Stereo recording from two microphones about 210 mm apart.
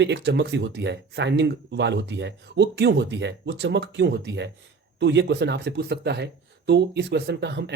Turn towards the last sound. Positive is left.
turn(degrees=-50)  # may be behind; listen again after turning